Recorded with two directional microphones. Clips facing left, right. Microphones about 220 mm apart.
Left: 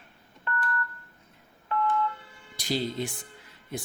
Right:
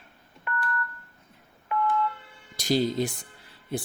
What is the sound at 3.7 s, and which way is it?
Speech, 30° right (ahead or behind).